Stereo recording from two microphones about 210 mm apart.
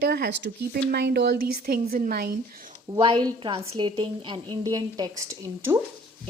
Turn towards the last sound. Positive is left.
turn(degrees=-15)  # may be behind; listen again after turning